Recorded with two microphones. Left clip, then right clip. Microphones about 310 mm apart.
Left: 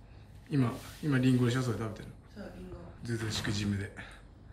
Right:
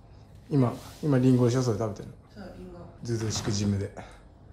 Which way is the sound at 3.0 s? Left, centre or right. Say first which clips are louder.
Right 4 dB; centre.